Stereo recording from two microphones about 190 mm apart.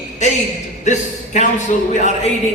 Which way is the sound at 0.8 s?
40° left (ahead or behind).